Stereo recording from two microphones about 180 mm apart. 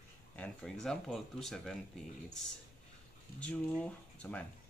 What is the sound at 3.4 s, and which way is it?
Speech, 5° left (ahead or behind).